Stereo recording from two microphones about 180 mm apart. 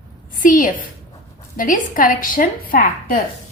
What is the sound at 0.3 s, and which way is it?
A woman's voice, 50° left (ahead or behind).